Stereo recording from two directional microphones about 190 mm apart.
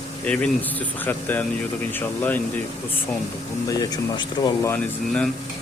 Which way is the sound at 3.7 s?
20° left (ahead or behind).